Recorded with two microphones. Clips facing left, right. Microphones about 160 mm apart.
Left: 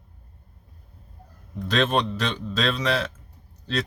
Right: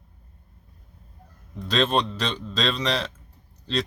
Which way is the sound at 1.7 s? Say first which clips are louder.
Even; centre (ahead or behind).